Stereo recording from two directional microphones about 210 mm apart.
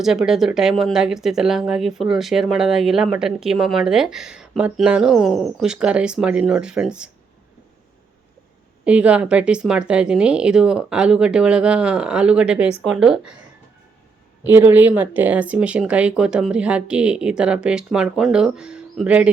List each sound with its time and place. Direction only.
0.0 s speech: centre (ahead or behind)
8.8 s speech: 5° right (ahead or behind)
14.4 s speech: 10° right (ahead or behind)